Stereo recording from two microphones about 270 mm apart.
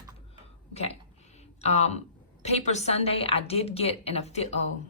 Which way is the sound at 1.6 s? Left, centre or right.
Left.